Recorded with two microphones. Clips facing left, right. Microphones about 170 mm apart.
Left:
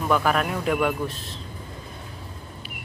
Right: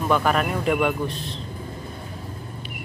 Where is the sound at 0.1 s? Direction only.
Centre (ahead or behind).